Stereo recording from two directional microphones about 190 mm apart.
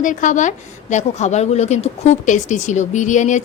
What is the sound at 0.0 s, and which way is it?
A woman's voice, 40° left (ahead or behind).